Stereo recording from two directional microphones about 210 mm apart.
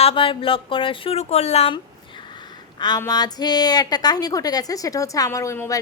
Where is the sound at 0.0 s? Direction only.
25° left (ahead or behind).